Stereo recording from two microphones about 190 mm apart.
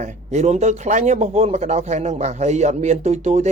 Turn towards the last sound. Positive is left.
turn(degrees=-35)  # may be behind; listen again after turning